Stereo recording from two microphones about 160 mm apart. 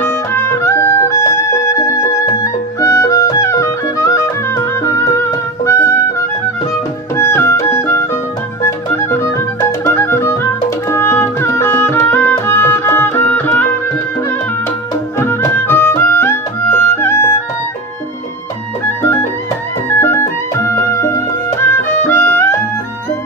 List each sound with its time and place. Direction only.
0.0 s music: 15° left (ahead or behind)
15.1 s music: 15° left (ahead or behind)
19.9 s music: 15° left (ahead or behind)